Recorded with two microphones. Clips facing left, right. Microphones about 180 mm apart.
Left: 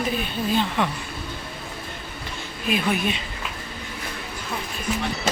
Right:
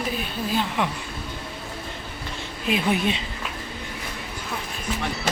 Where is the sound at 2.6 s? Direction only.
25° right (ahead or behind).